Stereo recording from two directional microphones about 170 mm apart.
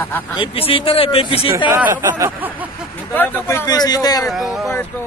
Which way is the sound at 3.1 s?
10° left (ahead or behind).